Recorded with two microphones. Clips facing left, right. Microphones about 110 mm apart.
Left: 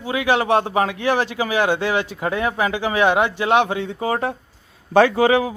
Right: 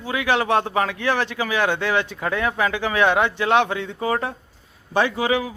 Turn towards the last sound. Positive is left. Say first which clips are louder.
# left 6 dB
turn(degrees=50)  # may be behind; listen again after turning